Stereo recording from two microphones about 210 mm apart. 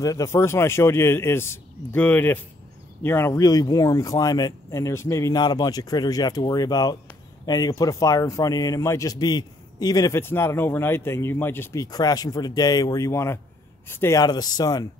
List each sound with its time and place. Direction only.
0.0 s speech: 15° left (ahead or behind)